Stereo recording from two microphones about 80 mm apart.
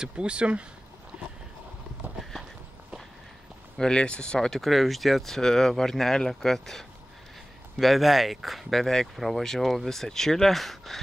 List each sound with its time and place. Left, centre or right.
0.0 s speech: centre
1.1 s a sound: centre
3.7 s speech: centre